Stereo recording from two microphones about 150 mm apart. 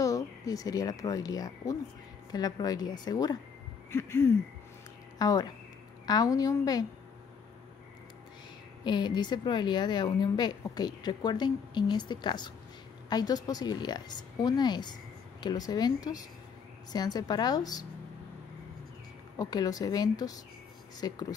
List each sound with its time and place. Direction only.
0.0 s a woman's voice: 20° left (ahead or behind)
3.9 s a sound: 15° left (ahead or behind)
5.2 s a woman's voice: 25° left (ahead or behind)
8.8 s a woman's voice: 30° left (ahead or behind)
19.3 s a woman's voice: 25° left (ahead or behind)